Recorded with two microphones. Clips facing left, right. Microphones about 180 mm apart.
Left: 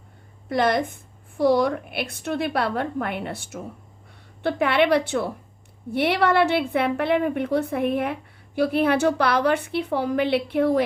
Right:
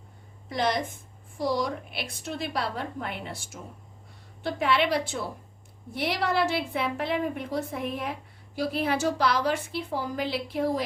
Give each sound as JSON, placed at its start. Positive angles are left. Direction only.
{"t": 0.4, "sound": "a woman's voice", "side_deg": 60}